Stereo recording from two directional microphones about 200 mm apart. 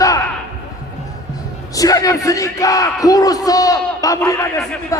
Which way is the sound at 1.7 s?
15° left (ahead or behind).